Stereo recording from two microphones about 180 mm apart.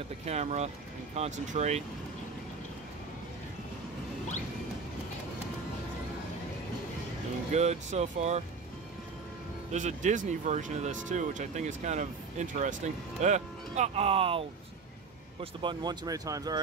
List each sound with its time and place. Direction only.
0.2 s speech: 35° right (ahead or behind)
7.5 s speech: 40° right (ahead or behind)
9.7 s speech: 40° right (ahead or behind)
15.6 s speech: 25° right (ahead or behind)